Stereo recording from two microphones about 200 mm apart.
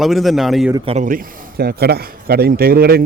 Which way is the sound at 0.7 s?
30° right (ahead or behind).